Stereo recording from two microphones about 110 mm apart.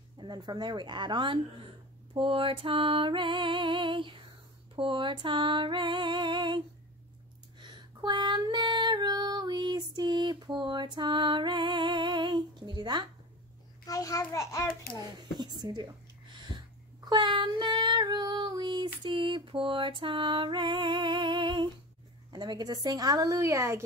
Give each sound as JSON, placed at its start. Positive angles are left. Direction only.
{"t": 0.2, "sound": "child singing", "side_deg": -45}
{"t": 7.6, "sound": "female singing", "side_deg": -45}
{"t": 13.8, "sound": "a child's voice", "side_deg": 30}
{"t": 15.0, "sound": "a woman's voice", "side_deg": -40}
{"t": 17.1, "sound": "child singing", "side_deg": -45}
{"t": 22.3, "sound": "a woman's voice", "side_deg": -40}